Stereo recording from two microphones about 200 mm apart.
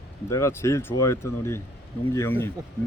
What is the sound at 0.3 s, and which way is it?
Speech, 15° left (ahead or behind).